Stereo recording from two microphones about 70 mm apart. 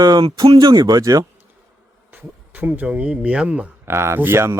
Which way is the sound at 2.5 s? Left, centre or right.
Right.